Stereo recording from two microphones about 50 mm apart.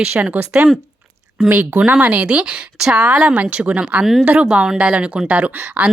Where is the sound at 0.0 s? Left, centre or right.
Right.